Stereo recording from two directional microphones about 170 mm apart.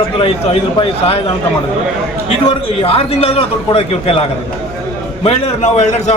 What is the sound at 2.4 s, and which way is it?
A man's voice, 35° left (ahead or behind).